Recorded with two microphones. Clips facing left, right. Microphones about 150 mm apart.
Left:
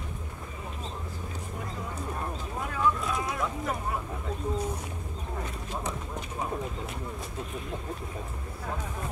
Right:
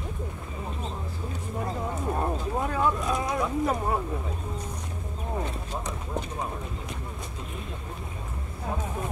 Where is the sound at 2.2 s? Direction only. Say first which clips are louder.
Right 7 dB; 40° right (ahead or behind).